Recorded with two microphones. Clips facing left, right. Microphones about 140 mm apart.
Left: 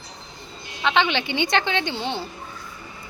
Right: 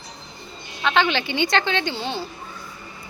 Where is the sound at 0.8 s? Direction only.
20° left (ahead or behind).